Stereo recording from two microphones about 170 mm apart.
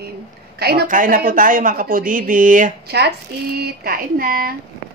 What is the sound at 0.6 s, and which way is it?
Speech, 65° right (ahead or behind).